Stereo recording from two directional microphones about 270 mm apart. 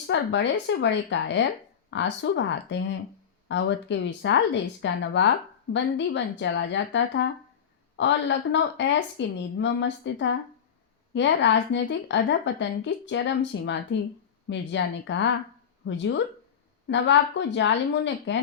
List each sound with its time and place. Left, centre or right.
0.1 s a woman's voice: left